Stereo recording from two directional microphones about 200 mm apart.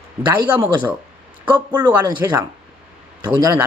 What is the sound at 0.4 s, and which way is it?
Speech, 15° right (ahead or behind).